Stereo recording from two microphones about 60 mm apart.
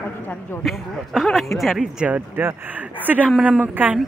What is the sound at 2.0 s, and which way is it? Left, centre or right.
Speech, right.